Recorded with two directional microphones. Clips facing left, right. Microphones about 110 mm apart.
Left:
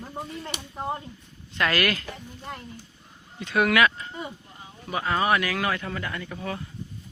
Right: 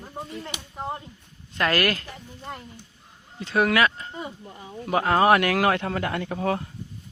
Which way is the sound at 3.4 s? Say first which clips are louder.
Even; 30° right (ahead or behind).